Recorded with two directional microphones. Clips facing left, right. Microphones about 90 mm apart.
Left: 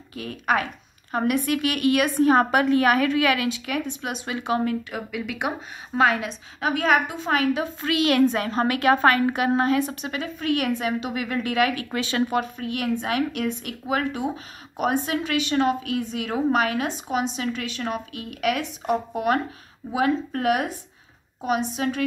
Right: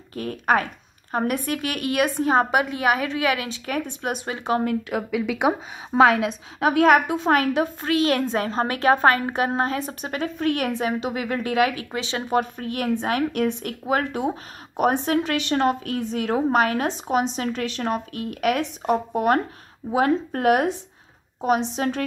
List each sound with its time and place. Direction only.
0.1 s a woman's voice: 40° right (ahead or behind)
5.5 s a woman's voice: 90° right; by 7.7 s 50° right (ahead or behind)
7.8 s a woman's voice: 35° right (ahead or behind)
10.7 s a woman's voice: 25° right (ahead or behind)
12.4 s a woman's voice: 35° right (ahead or behind)